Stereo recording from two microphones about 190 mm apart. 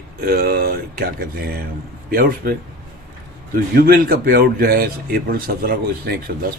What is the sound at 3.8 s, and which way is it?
Speech, 50° right (ahead or behind).